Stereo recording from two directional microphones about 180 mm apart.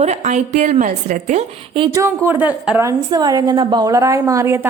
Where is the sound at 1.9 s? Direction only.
15° right (ahead or behind).